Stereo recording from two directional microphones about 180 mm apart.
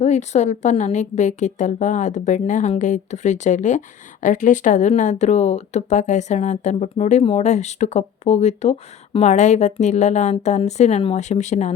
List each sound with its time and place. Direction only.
0.0 s a woman's voice: 40° left (ahead or behind)